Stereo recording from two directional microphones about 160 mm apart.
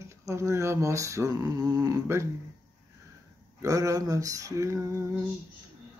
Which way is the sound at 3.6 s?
20° right (ahead or behind).